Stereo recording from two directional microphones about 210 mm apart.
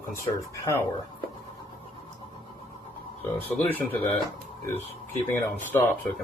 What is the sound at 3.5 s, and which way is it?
Speech, 10° left (ahead or behind).